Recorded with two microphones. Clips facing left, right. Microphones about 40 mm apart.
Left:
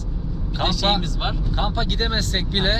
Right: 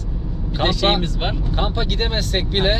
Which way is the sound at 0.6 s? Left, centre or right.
Right.